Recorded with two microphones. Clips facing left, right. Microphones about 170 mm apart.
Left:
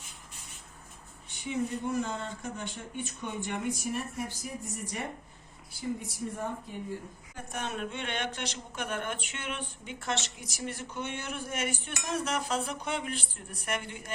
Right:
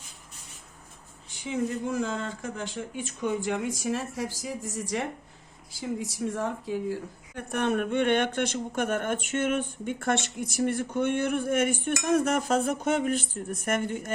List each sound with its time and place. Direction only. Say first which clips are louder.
1.3 s speech: right 3 dB; 90° right; by 14.1 s 45° right (ahead or behind)